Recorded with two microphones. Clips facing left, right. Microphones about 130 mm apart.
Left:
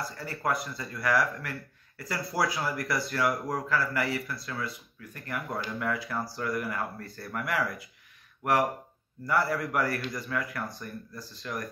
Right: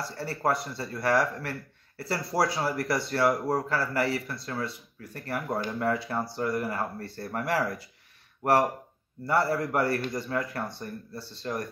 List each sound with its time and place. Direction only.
0.1 s speech: 35° right (ahead or behind)